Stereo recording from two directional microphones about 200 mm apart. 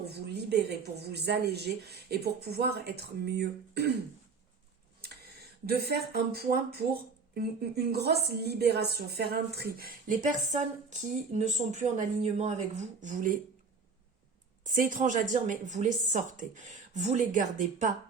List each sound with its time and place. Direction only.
0.0 s speech: 55° right (ahead or behind)
5.6 s speech: 50° right (ahead or behind)
11.3 s a woman's voice: 35° right (ahead or behind)
14.6 s a woman's voice: 40° right (ahead or behind)